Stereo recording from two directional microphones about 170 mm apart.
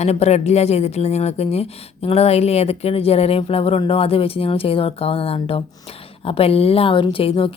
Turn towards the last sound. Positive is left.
turn(degrees=30)  # may be behind; listen again after turning